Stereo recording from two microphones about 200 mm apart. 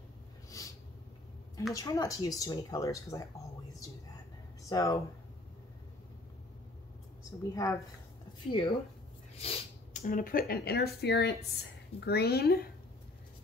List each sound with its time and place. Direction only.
0.6 s a sound: 15° left (ahead or behind)
1.7 s speech: 15° left (ahead or behind)
4.6 s speech: 15° left (ahead or behind)
7.6 s speech: 15° left (ahead or behind)
9.4 s a sound: 30° left (ahead or behind)
10.0 s speech: 45° left (ahead or behind)